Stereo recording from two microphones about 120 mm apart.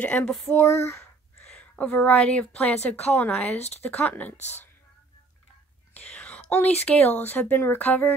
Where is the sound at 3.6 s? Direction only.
65° left (ahead or behind).